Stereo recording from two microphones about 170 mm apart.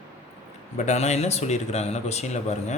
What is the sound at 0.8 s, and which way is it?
A man's voice, 40° left (ahead or behind).